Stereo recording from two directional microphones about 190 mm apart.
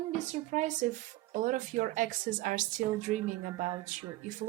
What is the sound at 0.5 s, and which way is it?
A woman's voice, 40° right (ahead or behind).